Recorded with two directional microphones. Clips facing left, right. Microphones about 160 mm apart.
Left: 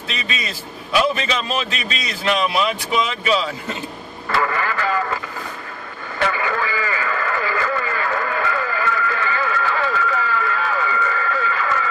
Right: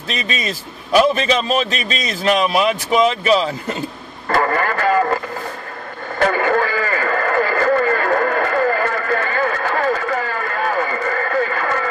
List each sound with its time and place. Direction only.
0.3 s speech: 45° right (ahead or behind)
4.3 s radio: 45° right (ahead or behind)